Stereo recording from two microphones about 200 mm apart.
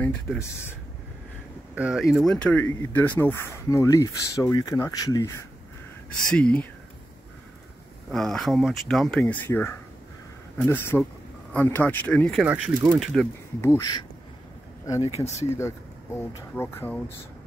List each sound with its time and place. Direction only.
0.0 s speech: 10° left (ahead or behind)
1.8 s speech: 5° right (ahead or behind); by 5.4 s 15° left (ahead or behind)
6.3 s speech: 5° left (ahead or behind)
8.1 s speech: centre (ahead or behind)
13.6 s speech: 15° left (ahead or behind)
15.0 s speech: 30° left (ahead or behind)
15.5 s speech: 10° left (ahead or behind)